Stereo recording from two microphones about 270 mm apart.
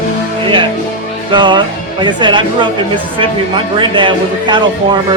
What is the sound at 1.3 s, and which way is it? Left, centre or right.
Music, centre.